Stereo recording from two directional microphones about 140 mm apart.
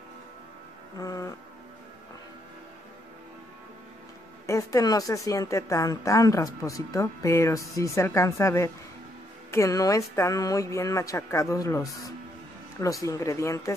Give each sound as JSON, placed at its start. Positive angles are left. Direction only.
{"t": 0.9, "sound": "music", "side_deg": 25}
{"t": 4.5, "sound": "a woman's voice", "side_deg": 25}